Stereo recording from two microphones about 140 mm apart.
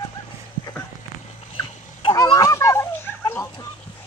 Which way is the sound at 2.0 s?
25° left (ahead or behind).